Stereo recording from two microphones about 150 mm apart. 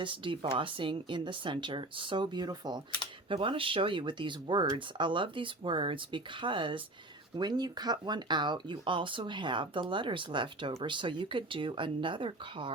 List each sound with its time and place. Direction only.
0.0 s speech: 35° right (ahead or behind)